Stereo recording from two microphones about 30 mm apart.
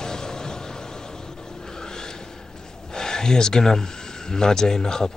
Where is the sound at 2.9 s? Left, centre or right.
Left.